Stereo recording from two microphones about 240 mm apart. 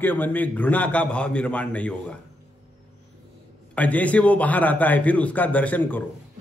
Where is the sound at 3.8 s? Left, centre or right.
Centre.